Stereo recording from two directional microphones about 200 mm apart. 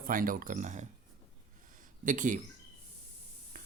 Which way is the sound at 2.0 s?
40° right (ahead or behind).